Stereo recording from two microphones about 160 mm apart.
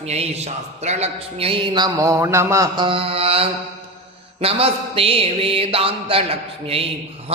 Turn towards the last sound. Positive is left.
turn(degrees=-35)  # may be behind; listen again after turning